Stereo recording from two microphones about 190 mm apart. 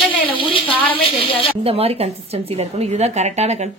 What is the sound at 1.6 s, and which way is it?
Speech, 30° right (ahead or behind).